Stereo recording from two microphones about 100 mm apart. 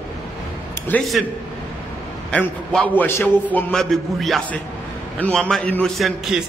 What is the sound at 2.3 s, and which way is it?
A man's voice, 10° left (ahead or behind).